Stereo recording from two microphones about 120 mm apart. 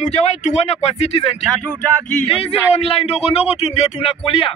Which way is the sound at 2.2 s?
60° left (ahead or behind).